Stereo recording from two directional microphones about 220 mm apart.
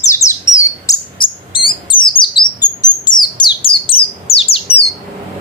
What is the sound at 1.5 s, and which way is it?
Bird, 20° left (ahead or behind).